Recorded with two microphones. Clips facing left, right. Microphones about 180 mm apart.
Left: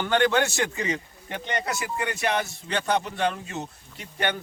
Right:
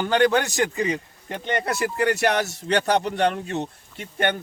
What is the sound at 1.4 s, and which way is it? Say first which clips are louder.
Speech: right 5 dB; 55° right (ahead or behind).